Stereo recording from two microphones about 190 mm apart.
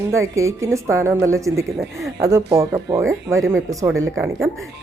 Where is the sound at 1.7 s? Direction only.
Centre (ahead or behind).